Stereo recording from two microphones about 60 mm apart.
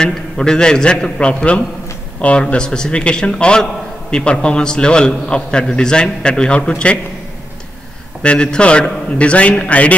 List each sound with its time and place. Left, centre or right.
0.0 s a man's voice: centre
8.2 s a man's voice: centre